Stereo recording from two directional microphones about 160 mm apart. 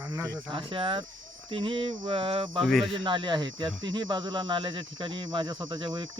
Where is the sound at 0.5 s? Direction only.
35° right (ahead or behind).